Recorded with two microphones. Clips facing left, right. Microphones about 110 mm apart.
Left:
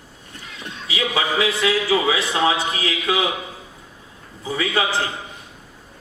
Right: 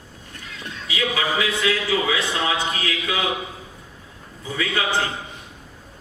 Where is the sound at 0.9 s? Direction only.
30° left (ahead or behind).